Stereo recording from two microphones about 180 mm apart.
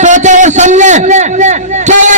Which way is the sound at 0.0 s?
40° right (ahead or behind).